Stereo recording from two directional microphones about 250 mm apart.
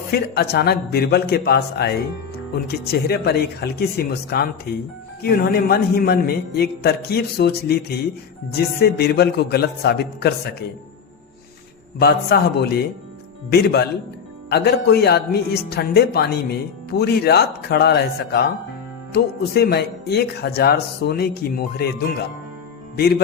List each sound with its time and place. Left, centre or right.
0.1 s speech: left
11.9 s speech: left
23.0 s speech: left